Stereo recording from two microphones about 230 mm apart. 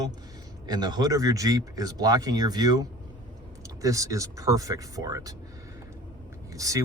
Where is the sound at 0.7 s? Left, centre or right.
Centre.